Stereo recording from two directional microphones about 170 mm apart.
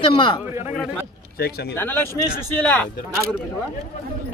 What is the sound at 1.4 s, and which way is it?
Speech, 65° left (ahead or behind).